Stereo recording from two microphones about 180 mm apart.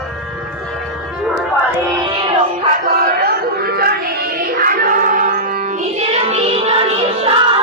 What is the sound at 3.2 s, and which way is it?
Music, 60° right (ahead or behind).